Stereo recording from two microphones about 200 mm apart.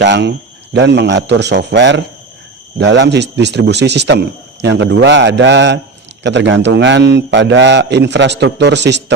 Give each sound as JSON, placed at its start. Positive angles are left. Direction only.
{"t": 0.0, "sound": "speech", "side_deg": -60}